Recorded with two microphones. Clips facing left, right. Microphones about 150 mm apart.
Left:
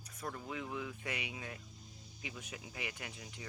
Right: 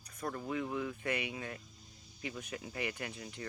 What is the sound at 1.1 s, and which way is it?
Speech, 55° right (ahead or behind).